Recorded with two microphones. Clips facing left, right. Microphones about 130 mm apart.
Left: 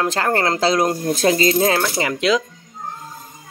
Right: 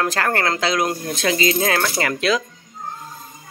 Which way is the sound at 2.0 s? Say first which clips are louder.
Left 2 dB; 20° left (ahead or behind).